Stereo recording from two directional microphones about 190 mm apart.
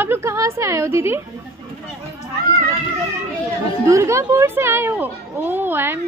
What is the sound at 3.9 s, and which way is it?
A woman's voice, 15° right (ahead or behind).